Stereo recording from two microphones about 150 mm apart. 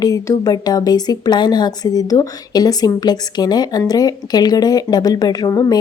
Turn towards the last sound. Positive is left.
turn(degrees=20)  # may be behind; listen again after turning